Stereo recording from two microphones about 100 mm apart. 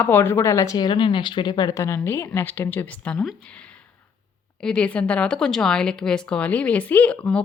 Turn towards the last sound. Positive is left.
turn(degrees=15)  # may be behind; listen again after turning